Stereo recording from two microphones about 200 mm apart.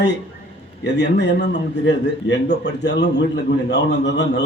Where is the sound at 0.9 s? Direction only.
55° left (ahead or behind).